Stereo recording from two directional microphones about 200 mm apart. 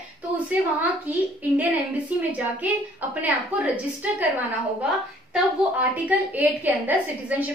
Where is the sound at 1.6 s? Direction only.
5° right (ahead or behind).